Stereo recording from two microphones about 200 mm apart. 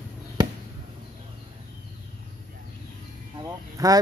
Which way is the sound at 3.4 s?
20° right (ahead or behind).